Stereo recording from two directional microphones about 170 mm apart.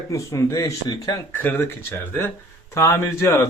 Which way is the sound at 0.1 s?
20° left (ahead or behind).